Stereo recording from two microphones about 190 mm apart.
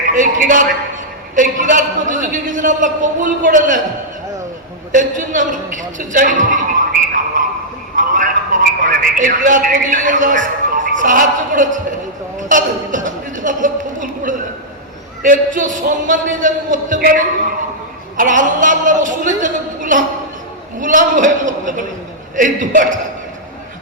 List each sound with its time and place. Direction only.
0.0 s a man's voice: 45° right (ahead or behind)
4.9 s a man's voice: 40° right (ahead or behind)
7.9 s a man's voice: 45° right (ahead or behind)
12.4 s a sound: 40° right (ahead or behind)
15.2 s a man's voice: 45° right (ahead or behind)